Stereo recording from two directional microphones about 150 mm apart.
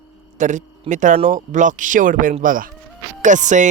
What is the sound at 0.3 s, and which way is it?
Speech, 55° right (ahead or behind).